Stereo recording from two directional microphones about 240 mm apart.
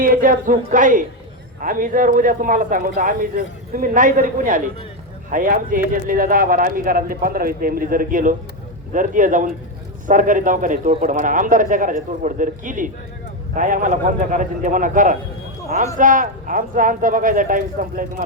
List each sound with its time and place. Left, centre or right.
0.0 s speech: right